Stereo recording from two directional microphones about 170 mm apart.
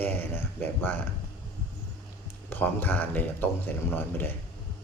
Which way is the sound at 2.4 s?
10° left (ahead or behind).